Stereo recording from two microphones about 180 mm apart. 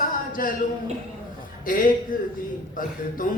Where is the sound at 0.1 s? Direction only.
50° left (ahead or behind).